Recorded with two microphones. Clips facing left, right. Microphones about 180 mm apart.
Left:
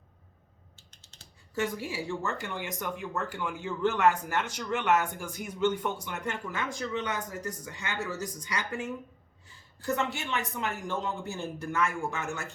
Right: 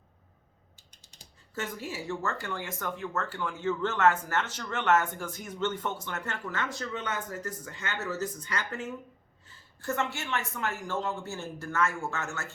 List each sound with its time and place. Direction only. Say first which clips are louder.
0.8 s typing: right 1 dB; 15° right (ahead or behind)
1.5 s speech: left 4 dB; 15° left (ahead or behind)